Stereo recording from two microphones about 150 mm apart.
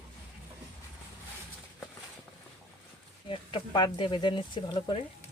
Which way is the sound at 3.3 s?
35° left (ahead or behind).